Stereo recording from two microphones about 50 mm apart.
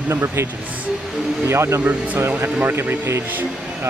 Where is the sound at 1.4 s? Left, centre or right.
Right.